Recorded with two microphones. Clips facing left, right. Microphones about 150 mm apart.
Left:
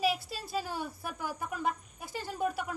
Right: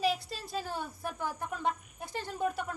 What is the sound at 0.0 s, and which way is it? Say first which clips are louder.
A woman's voice: even; 5° left (ahead or behind).